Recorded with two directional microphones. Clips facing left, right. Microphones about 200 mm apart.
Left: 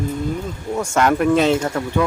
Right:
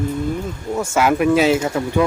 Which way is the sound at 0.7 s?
5° right (ahead or behind).